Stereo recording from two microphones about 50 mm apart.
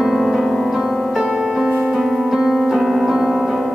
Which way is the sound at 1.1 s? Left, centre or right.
Centre.